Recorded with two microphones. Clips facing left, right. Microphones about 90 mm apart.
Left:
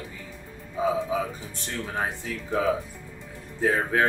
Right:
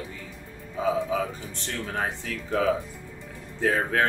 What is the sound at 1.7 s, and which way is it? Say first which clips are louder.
Speech: even; 15° left (ahead or behind).